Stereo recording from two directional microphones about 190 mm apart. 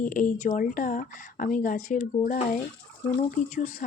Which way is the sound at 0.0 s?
45° left (ahead or behind).